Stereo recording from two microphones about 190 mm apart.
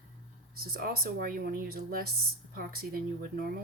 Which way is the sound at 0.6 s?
50° right (ahead or behind).